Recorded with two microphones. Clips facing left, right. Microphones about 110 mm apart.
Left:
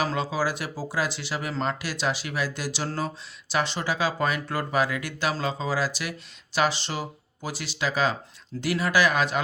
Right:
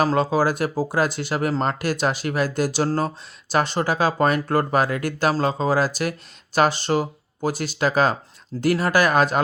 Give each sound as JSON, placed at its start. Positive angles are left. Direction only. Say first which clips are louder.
{"t": 0.0, "sound": "speech", "louder": "right 7 dB", "side_deg": -45}